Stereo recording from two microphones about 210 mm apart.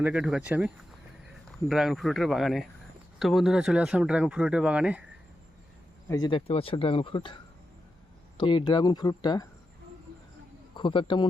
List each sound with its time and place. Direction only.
0.0 s speech: 5° right (ahead or behind)
6.1 s speech: 20° left (ahead or behind)
8.4 s speech: 20° left (ahead or behind)
10.8 s speech: 25° left (ahead or behind)